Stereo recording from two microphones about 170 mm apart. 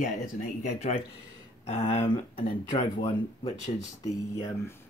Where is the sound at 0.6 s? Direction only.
40° left (ahead or behind).